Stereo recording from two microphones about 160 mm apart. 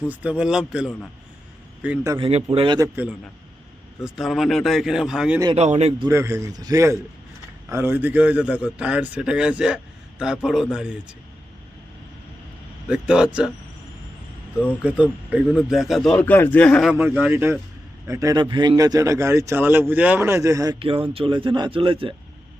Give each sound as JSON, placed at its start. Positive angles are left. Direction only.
{"t": 0.0, "sound": "a man's voice", "side_deg": -10}
{"t": 2.1, "sound": "a man's voice", "side_deg": -30}
{"t": 5.5, "sound": "speech", "side_deg": -40}
{"t": 6.1, "sound": "a man's voice", "side_deg": -15}
{"t": 12.9, "sound": "a man's voice", "side_deg": -5}
{"t": 14.7, "sound": "a man's voice", "side_deg": -10}
{"t": 16.9, "sound": "a man's voice", "side_deg": -10}
{"t": 20.7, "sound": "speech", "side_deg": -35}